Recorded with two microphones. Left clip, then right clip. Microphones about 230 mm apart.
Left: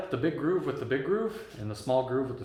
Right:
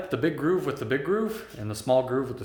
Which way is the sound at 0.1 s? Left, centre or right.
Right.